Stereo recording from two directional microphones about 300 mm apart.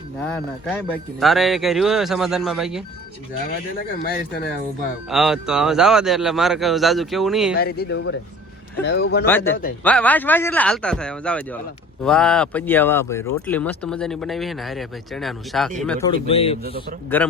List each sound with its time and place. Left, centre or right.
0.2 s a man's voice: centre
5.0 s a man's voice: centre
7.5 s speech: left
9.2 s a man's voice: centre
17.2 s a man's voice: centre